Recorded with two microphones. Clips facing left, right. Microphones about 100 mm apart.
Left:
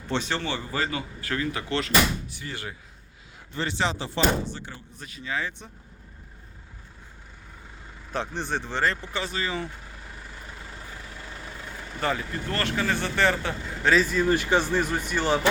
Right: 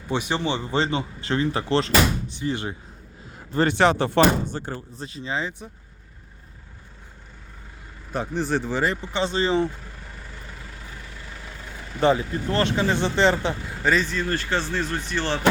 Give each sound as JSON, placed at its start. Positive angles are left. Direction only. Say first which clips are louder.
{"t": 0.1, "sound": "speech", "louder": "right 3 dB", "side_deg": -15}
{"t": 3.5, "sound": "speech", "louder": "right 9 dB", "side_deg": -50}
{"t": 4.9, "sound": "speech", "louder": "right 1 dB", "side_deg": -30}
{"t": 8.1, "sound": "speech", "louder": "right 5 dB", "side_deg": -5}
{"t": 11.9, "sound": "speech", "louder": "right 8 dB", "side_deg": -20}
{"t": 13.8, "sound": "speech", "louder": "left 2 dB", "side_deg": 0}